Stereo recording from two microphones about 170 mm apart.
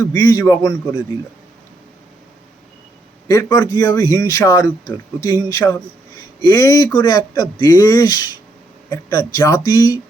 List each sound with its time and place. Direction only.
0.1 s a man's voice: 20° left (ahead or behind)
3.2 s a man's voice: 20° left (ahead or behind)